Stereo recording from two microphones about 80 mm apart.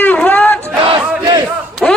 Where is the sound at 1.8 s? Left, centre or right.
Centre.